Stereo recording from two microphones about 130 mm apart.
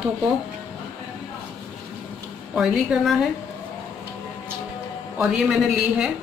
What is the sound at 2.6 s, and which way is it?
Speech, 5° right (ahead or behind).